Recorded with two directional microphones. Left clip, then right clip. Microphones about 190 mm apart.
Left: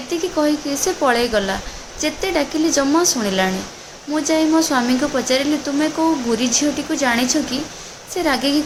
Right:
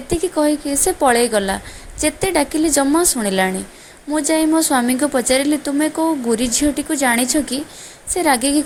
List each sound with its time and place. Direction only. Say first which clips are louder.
0.3 s a woman's voice: even; 40° right (ahead or behind)